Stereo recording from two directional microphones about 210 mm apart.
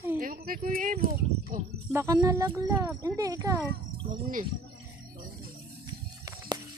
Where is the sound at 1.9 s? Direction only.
15° right (ahead or behind).